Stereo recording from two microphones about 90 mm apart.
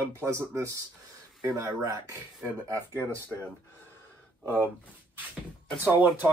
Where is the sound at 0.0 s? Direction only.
35° right (ahead or behind).